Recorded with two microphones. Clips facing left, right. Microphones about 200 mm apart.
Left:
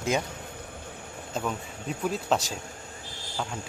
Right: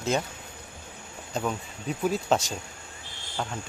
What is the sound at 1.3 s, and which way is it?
Speech, 5° right (ahead or behind).